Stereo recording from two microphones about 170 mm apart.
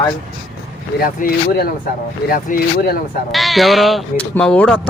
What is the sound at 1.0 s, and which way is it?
Speech, 60° left (ahead or behind).